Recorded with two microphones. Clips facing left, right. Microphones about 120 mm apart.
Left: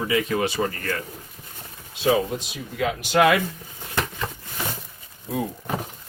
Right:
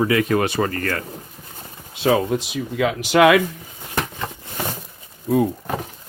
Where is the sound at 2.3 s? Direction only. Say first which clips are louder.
Right 8 dB; 85° right.